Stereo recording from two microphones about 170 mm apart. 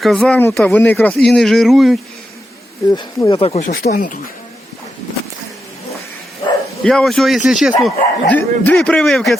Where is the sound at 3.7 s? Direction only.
60° left (ahead or behind).